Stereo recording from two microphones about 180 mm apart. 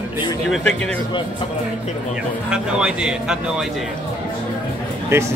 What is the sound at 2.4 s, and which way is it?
Speech, 5° right (ahead or behind).